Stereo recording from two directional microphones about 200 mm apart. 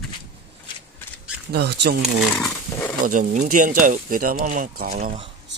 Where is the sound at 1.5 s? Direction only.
55° right (ahead or behind).